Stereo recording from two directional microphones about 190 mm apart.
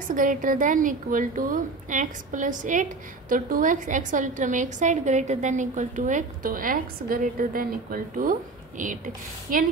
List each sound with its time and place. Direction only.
0.1 s a woman's voice: 45° right (ahead or behind)